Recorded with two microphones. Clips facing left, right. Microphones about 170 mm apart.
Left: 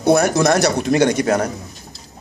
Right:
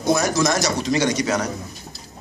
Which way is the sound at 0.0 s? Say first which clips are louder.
Left 5 dB; 60° left (ahead or behind).